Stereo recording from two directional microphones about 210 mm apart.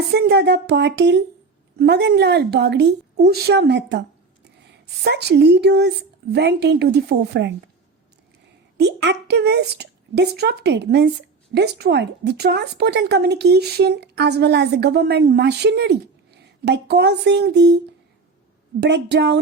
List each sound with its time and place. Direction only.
0.1 s speech: 50° right (ahead or behind)
5.0 s speech: 55° right (ahead or behind)
8.8 s speech: 55° right (ahead or behind)
18.8 s speech: 55° right (ahead or behind)